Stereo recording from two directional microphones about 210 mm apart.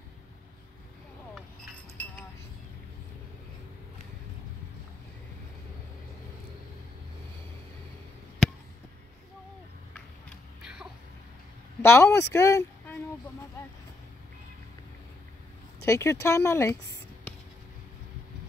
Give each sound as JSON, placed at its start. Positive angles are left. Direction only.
{"t": 8.4, "sound": "basketball bounce", "side_deg": 0}
{"t": 10.6, "sound": "a sound", "side_deg": -5}
{"t": 11.8, "sound": "speech", "side_deg": 10}
{"t": 15.8, "sound": "speech", "side_deg": 10}